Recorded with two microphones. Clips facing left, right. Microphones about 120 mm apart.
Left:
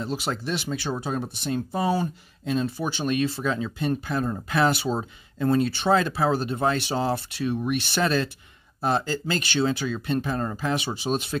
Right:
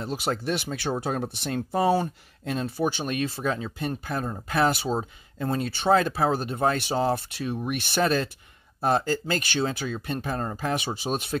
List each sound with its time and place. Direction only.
0.0 s speech: 50° right (ahead or behind)
1.3 s speech: 70° right (ahead or behind)
2.6 s speech: 50° right (ahead or behind)